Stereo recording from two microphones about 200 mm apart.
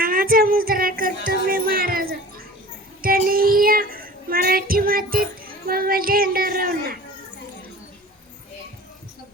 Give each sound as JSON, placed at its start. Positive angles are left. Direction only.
{"t": 0.0, "sound": "music", "side_deg": -45}
{"t": 3.2, "sound": "child singing", "side_deg": -45}